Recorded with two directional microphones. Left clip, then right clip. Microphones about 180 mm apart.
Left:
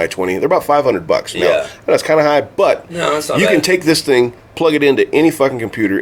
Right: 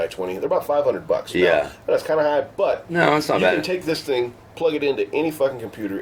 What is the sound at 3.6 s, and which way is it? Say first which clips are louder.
Speech: left 10 dB; 60° left (ahead or behind).